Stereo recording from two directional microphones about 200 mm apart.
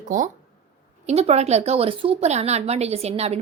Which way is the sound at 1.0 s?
30° right (ahead or behind).